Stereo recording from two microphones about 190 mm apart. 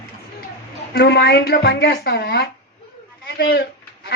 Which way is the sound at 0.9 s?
60° left (ahead or behind).